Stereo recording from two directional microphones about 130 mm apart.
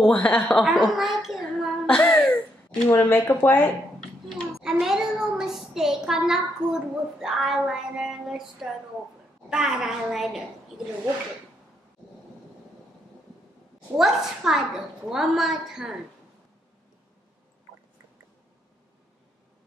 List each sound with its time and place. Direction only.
0.0 s speech: 10° left (ahead or behind)
0.7 s a woman's voice: centre (ahead or behind)
1.2 s child singing: centre (ahead or behind)
2.0 s a sound: 15° left (ahead or behind)
2.9 s speech: 15° left (ahead or behind)
4.6 s a child's voice: centre (ahead or behind)
13.9 s a woman's voice: 5° right (ahead or behind)